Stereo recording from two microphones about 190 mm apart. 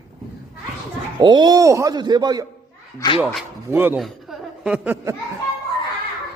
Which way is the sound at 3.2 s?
5° right (ahead or behind).